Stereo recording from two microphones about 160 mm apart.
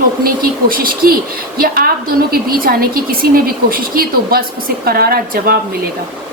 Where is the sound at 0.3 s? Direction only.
65° right (ahead or behind).